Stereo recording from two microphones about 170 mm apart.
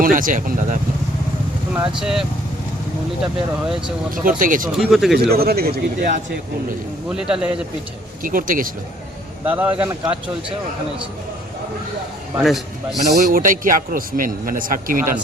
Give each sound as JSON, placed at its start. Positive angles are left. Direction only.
{"t": 0.0, "sound": "speech", "side_deg": -50}
{"t": 1.7, "sound": "a man's voice", "side_deg": -5}
{"t": 3.6, "sound": "a man's voice", "side_deg": -5}
{"t": 4.1, "sound": "speech", "side_deg": -55}
{"t": 4.8, "sound": "a man's voice", "side_deg": 0}
{"t": 5.3, "sound": "a man's voice", "side_deg": -65}
{"t": 7.1, "sound": "a man's voice", "side_deg": -5}
{"t": 8.2, "sound": "speech", "side_deg": -55}
{"t": 9.4, "sound": "a man's voice", "side_deg": -10}
{"t": 12.4, "sound": "a man's voice", "side_deg": 0}
{"t": 13.2, "sound": "speech", "side_deg": -55}